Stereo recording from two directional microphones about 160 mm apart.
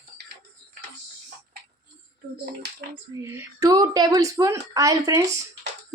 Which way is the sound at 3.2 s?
20° right (ahead or behind).